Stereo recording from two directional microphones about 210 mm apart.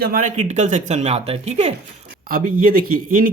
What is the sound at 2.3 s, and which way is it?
Speech, 45° right (ahead or behind).